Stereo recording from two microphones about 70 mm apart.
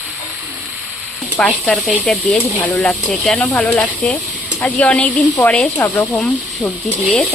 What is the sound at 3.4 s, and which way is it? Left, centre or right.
Speech, left.